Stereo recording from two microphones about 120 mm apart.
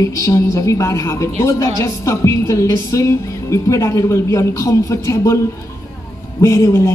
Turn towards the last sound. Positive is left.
turn(degrees=25)  # may be behind; listen again after turning